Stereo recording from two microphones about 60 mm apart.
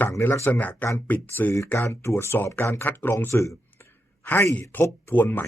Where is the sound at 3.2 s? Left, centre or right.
Left.